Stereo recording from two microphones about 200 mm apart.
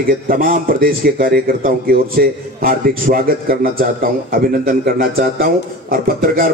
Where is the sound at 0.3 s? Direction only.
45° right (ahead or behind).